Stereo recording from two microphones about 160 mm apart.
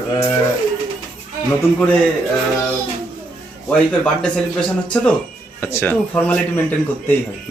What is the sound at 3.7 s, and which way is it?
A man's voice, 5° left (ahead or behind).